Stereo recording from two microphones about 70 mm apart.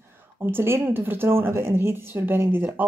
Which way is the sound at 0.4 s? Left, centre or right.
Right.